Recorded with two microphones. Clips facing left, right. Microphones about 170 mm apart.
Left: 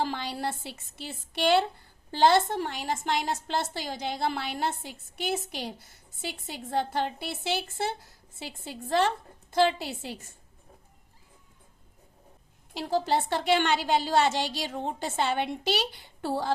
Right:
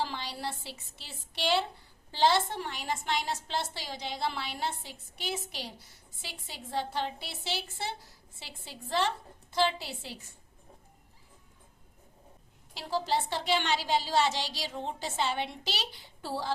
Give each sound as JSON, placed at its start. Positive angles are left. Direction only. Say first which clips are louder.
{"t": 0.0, "sound": "a woman's voice", "louder": "left 5 dB", "side_deg": 50}
{"t": 12.7, "sound": "a woman's voice", "louder": "left 4 dB", "side_deg": 50}